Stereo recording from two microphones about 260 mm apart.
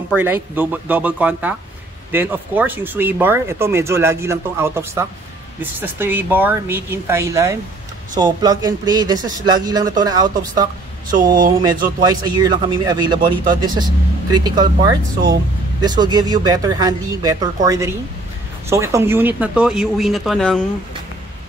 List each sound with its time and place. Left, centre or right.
0.1 s speech: centre